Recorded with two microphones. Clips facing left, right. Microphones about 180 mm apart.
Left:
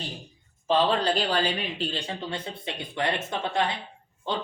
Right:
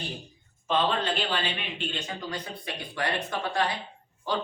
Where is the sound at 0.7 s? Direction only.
35° left (ahead or behind).